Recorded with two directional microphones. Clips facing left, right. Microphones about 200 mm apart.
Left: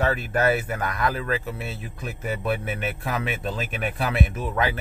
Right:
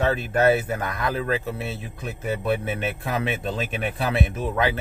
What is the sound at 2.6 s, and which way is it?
Speech, 25° right (ahead or behind).